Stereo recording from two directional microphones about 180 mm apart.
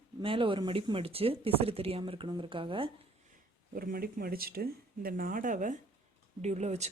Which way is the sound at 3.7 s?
55° right (ahead or behind).